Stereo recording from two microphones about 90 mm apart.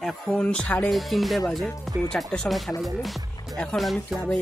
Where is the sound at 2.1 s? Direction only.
10° left (ahead or behind).